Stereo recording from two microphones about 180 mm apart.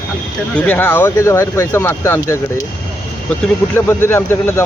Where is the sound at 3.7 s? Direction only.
15° left (ahead or behind).